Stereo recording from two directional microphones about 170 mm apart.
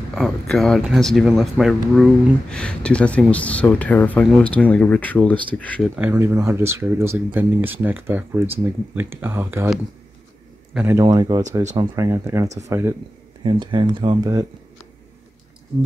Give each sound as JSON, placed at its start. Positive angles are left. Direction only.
{"t": 0.1, "sound": "speech", "side_deg": 0}
{"t": 5.9, "sound": "speech", "side_deg": -15}
{"t": 10.7, "sound": "a man's voice", "side_deg": -5}
{"t": 11.0, "sound": "speech", "side_deg": -25}
{"t": 13.4, "sound": "speech", "side_deg": -30}